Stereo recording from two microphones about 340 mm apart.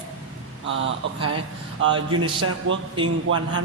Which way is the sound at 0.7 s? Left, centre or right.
Right.